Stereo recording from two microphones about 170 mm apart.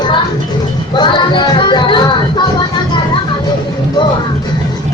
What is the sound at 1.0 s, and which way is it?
Music, 25° left (ahead or behind).